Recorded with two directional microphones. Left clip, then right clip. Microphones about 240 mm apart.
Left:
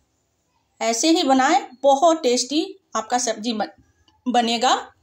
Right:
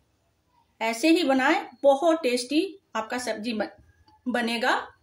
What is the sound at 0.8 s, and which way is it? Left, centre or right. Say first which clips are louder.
A woman's voice: left 4 dB; centre.